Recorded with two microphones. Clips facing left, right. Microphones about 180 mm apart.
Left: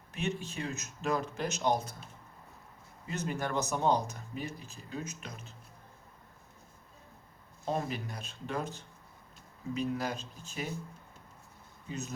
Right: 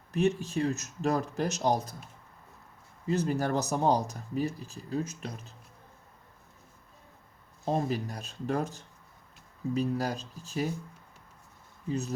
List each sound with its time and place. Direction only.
0.1 s speech: 40° right (ahead or behind)
3.1 s speech: 35° right (ahead or behind)
7.6 s speech: 30° right (ahead or behind)
11.9 s speech: 35° right (ahead or behind)